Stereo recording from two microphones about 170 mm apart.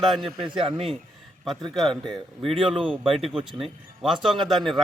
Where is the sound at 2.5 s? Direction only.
35° right (ahead or behind).